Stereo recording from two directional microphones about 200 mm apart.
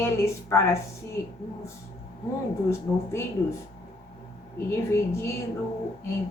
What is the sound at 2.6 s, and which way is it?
Speech, 15° left (ahead or behind).